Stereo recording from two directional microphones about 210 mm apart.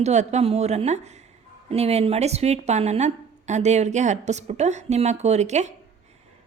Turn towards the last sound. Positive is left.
turn(degrees=-35)  # may be behind; listen again after turning